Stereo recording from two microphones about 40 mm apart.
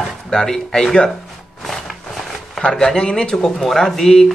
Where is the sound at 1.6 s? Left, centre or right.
Centre.